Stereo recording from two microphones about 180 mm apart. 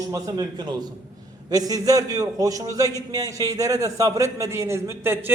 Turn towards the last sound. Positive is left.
turn(degrees=-15)  # may be behind; listen again after turning